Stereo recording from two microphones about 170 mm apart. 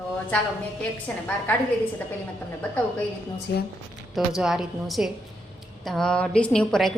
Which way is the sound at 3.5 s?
90° left.